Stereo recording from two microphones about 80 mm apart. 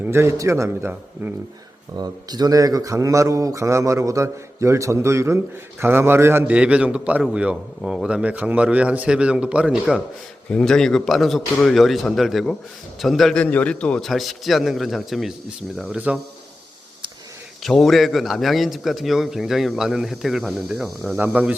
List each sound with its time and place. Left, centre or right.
0.0 s a man's voice: right
2.0 s a man's voice: right
6.5 s a man's voice: centre
10.5 s a man's voice: centre
13.3 s a man's voice: centre
14.0 s a man's voice: centre
17.6 s a man's voice: centre
21.2 s a man's voice: centre